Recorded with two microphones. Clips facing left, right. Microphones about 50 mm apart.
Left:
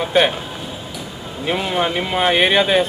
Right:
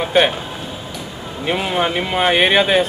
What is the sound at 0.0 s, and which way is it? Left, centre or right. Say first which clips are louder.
Speech: right 1 dB; centre.